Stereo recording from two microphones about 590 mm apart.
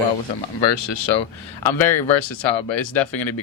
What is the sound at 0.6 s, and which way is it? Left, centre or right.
Speech, left.